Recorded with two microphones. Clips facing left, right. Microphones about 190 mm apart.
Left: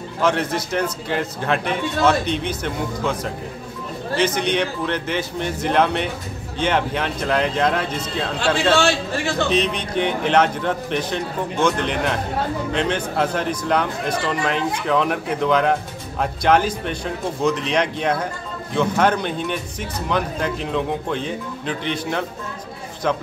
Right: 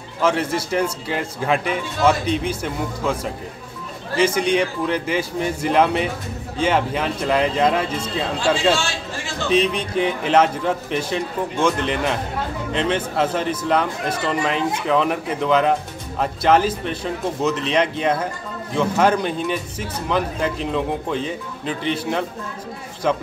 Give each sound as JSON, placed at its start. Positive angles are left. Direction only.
{"t": 0.2, "sound": "speech", "side_deg": -5}
{"t": 4.2, "sound": "a man's voice", "side_deg": -10}
{"t": 8.4, "sound": "a man's voice", "side_deg": 65}
{"t": 9.5, "sound": "speech", "side_deg": -5}